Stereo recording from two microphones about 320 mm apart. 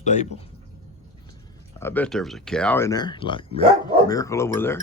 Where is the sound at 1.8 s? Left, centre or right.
Centre.